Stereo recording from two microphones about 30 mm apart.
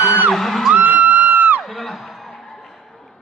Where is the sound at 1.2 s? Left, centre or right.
Right.